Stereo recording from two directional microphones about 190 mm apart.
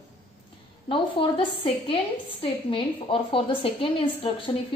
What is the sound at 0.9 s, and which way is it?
A woman's voice, 25° left (ahead or behind).